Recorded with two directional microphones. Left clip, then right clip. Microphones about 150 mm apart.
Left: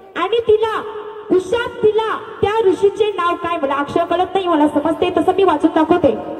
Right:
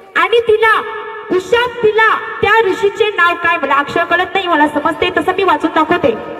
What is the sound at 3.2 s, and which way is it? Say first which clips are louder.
Speech: right 7 dB; 40° right (ahead or behind).